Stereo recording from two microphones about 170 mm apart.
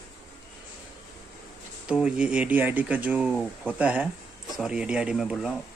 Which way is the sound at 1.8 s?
5° right (ahead or behind).